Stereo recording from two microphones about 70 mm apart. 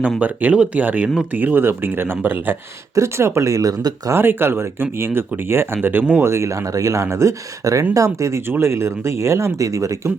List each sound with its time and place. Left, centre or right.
0.2 s speech: centre
2.9 s speech: right
4.1 s speech: right
6.2 s speech: right
8.4 s speech: right